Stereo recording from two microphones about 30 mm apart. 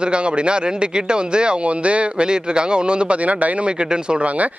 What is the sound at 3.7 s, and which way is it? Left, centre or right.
Speech, right.